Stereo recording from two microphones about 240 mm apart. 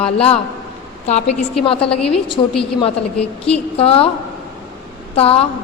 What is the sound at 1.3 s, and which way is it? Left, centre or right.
Speech, left.